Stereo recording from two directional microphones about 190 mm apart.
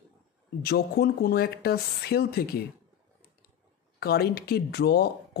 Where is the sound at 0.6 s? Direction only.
55° left (ahead or behind).